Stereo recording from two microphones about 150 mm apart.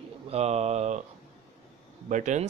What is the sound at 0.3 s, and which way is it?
Speech, 45° right (ahead or behind).